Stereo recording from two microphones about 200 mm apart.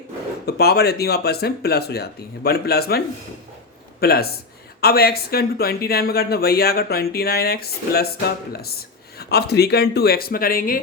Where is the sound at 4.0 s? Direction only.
50° left (ahead or behind).